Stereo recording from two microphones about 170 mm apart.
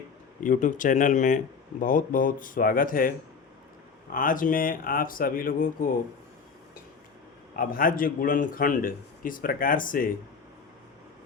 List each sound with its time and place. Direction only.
0.4 s a man's voice: 50° left (ahead or behind)
4.1 s a man's voice: 50° left (ahead or behind)
7.5 s a man's voice: 55° left (ahead or behind)